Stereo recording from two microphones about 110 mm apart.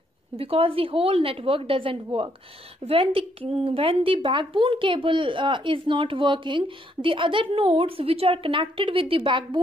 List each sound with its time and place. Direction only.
0.4 s a woman's voice: 60° right (ahead or behind)